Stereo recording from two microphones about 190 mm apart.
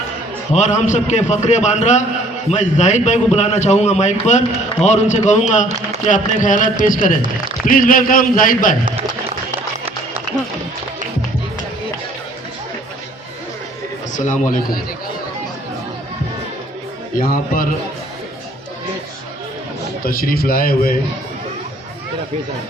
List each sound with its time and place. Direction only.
0.5 s a man's voice: 40° left (ahead or behind)
14.1 s a man's voice: 40° left (ahead or behind)
17.2 s a man's voice: 50° left (ahead or behind)
20.1 s a man's voice: 50° left (ahead or behind)